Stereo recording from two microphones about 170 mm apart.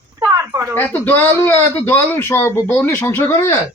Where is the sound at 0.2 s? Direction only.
20° right (ahead or behind).